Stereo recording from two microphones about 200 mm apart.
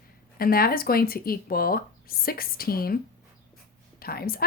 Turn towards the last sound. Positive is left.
turn(degrees=50)  # may be behind; listen again after turning